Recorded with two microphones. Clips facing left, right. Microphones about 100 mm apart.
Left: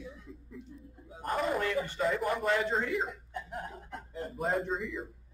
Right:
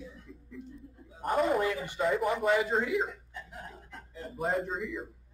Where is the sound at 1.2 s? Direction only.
5° right (ahead or behind).